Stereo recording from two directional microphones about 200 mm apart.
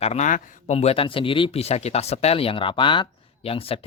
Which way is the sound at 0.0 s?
35° left (ahead or behind).